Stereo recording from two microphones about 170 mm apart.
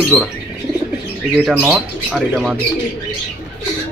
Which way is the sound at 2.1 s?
Centre (ahead or behind).